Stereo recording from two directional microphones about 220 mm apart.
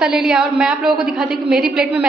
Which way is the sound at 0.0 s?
5° right (ahead or behind).